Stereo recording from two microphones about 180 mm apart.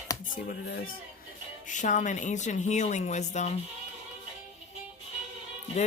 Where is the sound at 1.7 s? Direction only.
45° left (ahead or behind).